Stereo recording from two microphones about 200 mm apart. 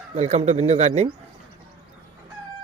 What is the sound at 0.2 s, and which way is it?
Speech, 35° right (ahead or behind).